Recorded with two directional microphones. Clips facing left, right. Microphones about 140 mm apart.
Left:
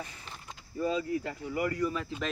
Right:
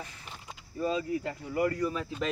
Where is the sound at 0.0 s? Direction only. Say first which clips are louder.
Left 1 dB; 10° right (ahead or behind).